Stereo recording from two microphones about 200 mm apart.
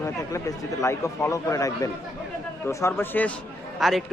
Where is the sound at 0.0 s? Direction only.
15° left (ahead or behind).